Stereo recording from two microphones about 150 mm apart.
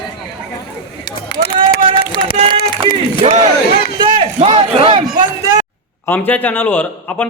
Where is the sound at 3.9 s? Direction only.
35° right (ahead or behind).